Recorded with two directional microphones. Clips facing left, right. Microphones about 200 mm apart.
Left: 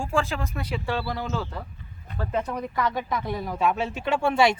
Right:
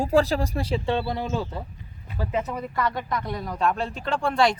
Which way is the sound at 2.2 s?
5° right (ahead or behind).